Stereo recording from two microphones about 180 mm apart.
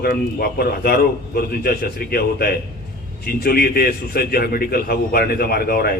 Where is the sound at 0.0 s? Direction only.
60° left (ahead or behind).